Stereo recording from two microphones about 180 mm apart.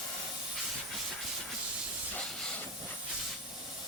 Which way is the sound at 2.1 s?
5° left (ahead or behind).